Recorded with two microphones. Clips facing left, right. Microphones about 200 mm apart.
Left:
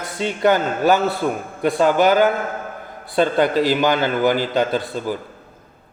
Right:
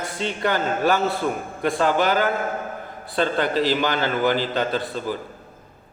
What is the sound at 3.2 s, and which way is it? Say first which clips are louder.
A man's voice: left 4 dB; 45° left (ahead or behind).